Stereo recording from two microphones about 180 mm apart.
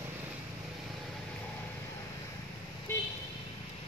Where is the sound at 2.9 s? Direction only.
15° left (ahead or behind).